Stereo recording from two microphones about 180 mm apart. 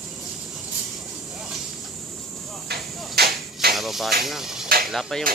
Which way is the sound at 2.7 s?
65° right (ahead or behind).